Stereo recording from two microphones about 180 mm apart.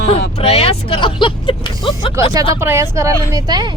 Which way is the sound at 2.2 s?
15° right (ahead or behind).